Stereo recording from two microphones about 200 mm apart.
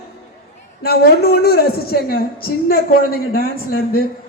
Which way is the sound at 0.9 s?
50° left (ahead or behind).